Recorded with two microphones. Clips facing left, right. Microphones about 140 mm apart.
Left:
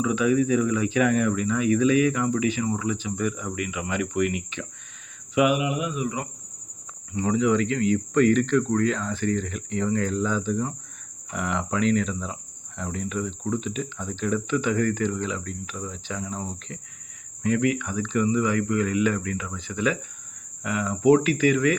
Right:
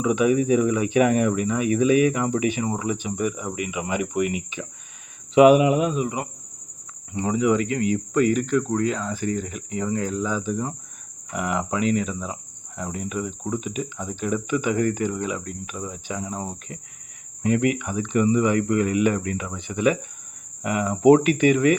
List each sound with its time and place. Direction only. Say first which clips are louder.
0.0 s speech: right 2 dB; 20° right (ahead or behind)
5.3 s speech: right 8 dB; 30° right (ahead or behind)